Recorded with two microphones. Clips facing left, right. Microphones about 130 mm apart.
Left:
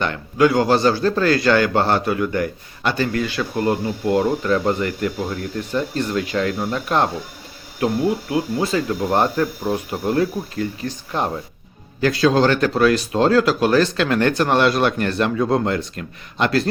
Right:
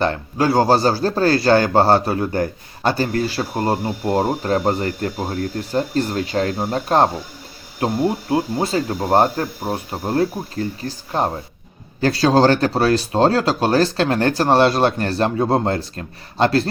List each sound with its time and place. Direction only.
0.0 s speech: 35° right (ahead or behind)